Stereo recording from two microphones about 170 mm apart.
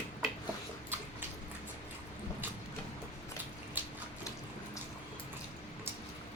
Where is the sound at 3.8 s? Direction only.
10° right (ahead or behind).